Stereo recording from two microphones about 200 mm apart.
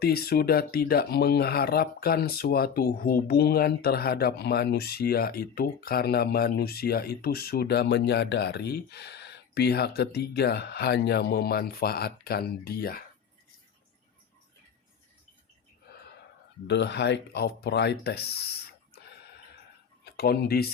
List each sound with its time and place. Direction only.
0.0 s speech: 50° left (ahead or behind)
16.6 s speech: 60° left (ahead or behind)
20.1 s speech: 55° left (ahead or behind)